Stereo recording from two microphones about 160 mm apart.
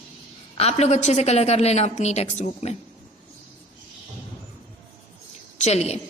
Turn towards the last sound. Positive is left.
turn(degrees=40)  # may be behind; listen again after turning